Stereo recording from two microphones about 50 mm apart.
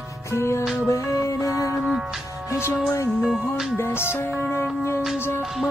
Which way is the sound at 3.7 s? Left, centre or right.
Left.